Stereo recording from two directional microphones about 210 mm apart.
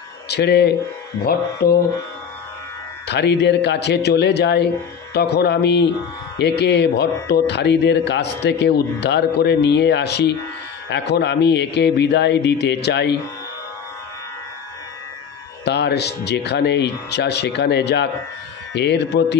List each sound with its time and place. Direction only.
0.3 s speech: 50° left (ahead or behind)
3.1 s speech: 55° left (ahead or behind)
15.6 s speech: 55° left (ahead or behind)